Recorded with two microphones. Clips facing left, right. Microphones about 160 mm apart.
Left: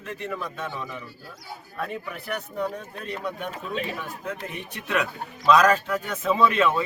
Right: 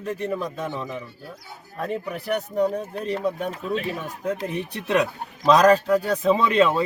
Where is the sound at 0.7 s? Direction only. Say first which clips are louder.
Right 4 dB; 25° right (ahead or behind).